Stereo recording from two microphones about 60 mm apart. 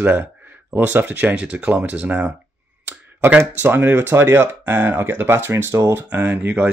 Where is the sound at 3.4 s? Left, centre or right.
Right.